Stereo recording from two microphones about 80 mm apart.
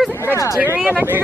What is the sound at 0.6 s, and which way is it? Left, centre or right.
Speech, right.